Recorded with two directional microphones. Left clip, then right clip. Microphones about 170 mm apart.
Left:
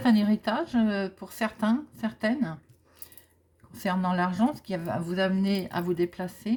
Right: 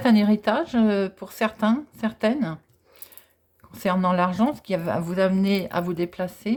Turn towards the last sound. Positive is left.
turn(degrees=-25)  # may be behind; listen again after turning